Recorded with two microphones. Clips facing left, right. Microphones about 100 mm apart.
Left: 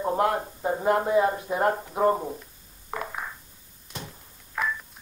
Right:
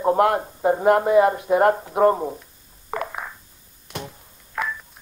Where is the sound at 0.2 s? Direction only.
70° right (ahead or behind).